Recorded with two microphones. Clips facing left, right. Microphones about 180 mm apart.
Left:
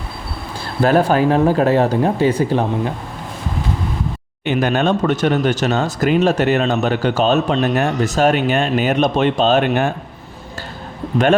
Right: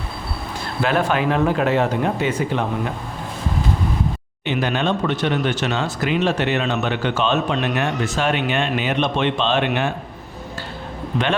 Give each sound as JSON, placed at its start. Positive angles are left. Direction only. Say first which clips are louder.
{"t": 0.8, "sound": "speech", "louder": "left 6 dB", "side_deg": 35}
{"t": 4.4, "sound": "speech", "louder": "left 4 dB", "side_deg": 45}